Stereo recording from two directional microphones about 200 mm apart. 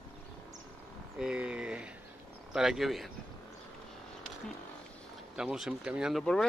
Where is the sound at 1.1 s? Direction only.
5° right (ahead or behind).